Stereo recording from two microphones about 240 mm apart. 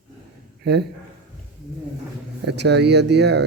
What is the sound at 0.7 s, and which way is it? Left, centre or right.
Speech, right.